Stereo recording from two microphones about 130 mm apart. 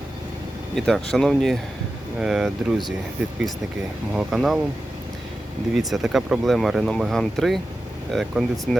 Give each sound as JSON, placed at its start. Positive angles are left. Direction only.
{"t": 0.8, "sound": "speech", "side_deg": 5}
{"t": 4.1, "sound": "speech", "side_deg": 0}
{"t": 5.7, "sound": "speech", "side_deg": 0}